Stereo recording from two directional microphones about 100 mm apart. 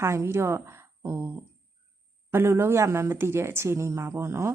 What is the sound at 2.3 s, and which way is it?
A woman's voice, 25° right (ahead or behind).